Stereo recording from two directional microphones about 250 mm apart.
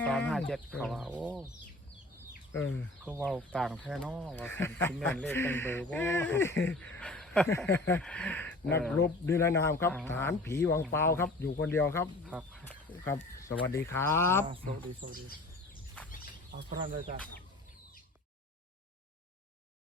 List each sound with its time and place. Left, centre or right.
0.0 s speech: centre
3.2 s speech: centre
12.3 s speech: centre
12.9 s speech: centre
15.0 s speech: right
16.6 s speech: right